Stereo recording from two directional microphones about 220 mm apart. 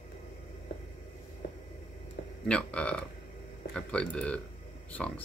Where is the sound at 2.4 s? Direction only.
5° left (ahead or behind).